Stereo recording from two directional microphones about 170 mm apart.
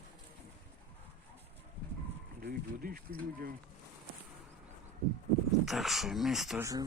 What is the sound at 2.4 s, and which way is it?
Speech, 60° right (ahead or behind).